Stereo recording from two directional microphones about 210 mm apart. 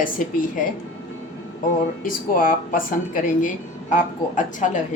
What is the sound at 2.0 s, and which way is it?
Speech, 40° left (ahead or behind).